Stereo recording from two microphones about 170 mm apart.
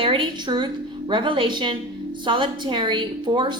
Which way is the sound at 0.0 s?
30° right (ahead or behind).